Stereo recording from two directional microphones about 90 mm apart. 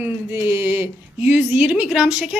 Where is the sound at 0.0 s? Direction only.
25° right (ahead or behind).